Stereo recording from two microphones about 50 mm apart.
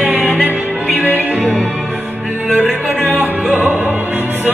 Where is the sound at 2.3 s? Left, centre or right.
Right.